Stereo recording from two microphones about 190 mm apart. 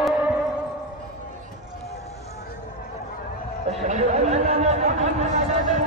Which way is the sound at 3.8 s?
35° right (ahead or behind).